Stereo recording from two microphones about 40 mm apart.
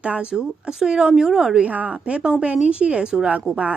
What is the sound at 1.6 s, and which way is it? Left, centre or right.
Speech, right.